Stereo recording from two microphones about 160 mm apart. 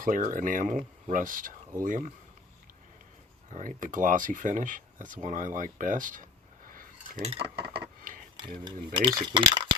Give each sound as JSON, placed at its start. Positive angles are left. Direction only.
{"t": 0.0, "sound": "speech", "side_deg": -60}
{"t": 3.8, "sound": "speech", "side_deg": -55}
{"t": 7.2, "sound": "cutlery", "side_deg": -35}
{"t": 8.5, "sound": "speech", "side_deg": -25}